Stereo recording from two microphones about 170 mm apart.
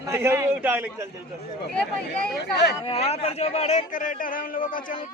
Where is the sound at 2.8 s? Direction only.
35° left (ahead or behind).